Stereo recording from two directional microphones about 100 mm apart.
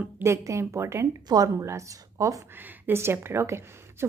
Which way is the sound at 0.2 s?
25° right (ahead or behind).